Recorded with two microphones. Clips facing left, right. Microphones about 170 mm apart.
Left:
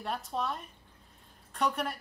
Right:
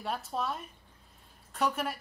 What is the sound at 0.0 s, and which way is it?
A woman's voice, centre (ahead or behind).